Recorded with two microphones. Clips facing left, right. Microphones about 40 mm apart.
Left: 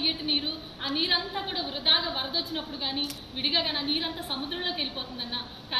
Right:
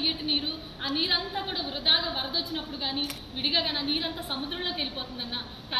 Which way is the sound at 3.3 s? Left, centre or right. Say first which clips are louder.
Even; centre.